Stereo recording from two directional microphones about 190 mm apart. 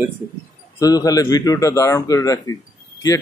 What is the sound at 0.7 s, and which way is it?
A man's voice, 20° left (ahead or behind).